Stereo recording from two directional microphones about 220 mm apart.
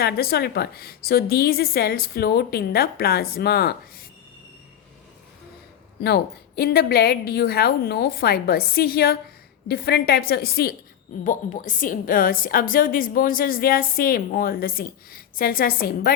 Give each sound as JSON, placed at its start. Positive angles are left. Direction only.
{"t": 0.0, "sound": "a woman's voice", "side_deg": 45}
{"t": 6.0, "sound": "a woman's voice", "side_deg": 45}